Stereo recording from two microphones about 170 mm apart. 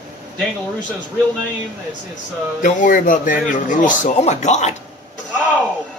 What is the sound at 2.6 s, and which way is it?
Speech, 50° left (ahead or behind).